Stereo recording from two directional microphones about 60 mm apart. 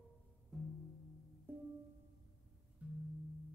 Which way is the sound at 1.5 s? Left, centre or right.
Right.